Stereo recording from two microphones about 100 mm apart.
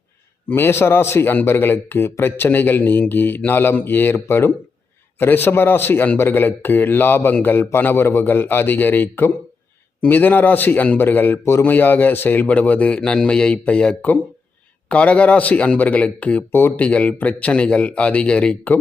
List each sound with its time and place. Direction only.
0.5 s a man's voice: 25° left (ahead or behind)